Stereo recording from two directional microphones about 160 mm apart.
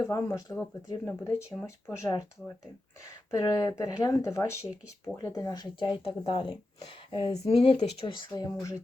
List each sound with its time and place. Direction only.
0.0 s speech: 20° left (ahead or behind)
3.3 s speech: 20° left (ahead or behind)